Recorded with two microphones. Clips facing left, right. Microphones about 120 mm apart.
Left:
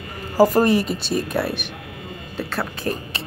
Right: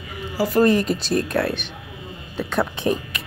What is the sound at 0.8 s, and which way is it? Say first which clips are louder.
Speech: right 2 dB; centre (ahead or behind).